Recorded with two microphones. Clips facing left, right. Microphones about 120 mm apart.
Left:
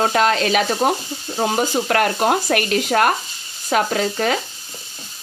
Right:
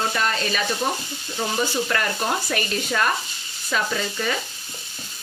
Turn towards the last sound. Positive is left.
turn(degrees=65)  # may be behind; listen again after turning